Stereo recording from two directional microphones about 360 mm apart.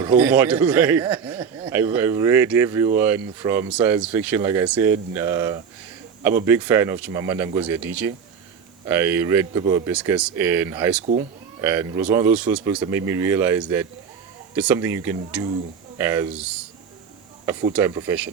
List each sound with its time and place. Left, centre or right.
0.0 s a man's voice: centre
11.0 s speech: centre
11.6 s a man's voice: centre